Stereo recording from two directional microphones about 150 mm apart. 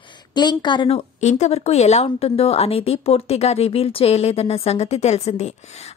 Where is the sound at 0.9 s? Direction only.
50° left (ahead or behind).